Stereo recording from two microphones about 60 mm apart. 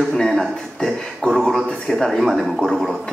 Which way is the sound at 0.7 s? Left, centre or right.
Centre.